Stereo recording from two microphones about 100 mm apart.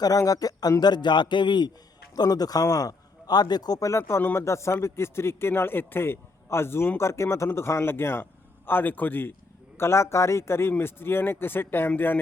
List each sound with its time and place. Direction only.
0.0 s a man's voice: 35° left (ahead or behind); by 12.2 s 20° left (ahead or behind)